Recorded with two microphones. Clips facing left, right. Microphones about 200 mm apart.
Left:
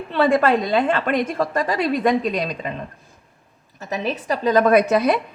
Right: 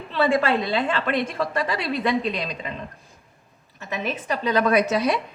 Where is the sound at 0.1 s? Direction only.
50° left (ahead or behind).